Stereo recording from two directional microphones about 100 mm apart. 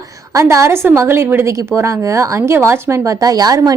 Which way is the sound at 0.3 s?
30° right (ahead or behind).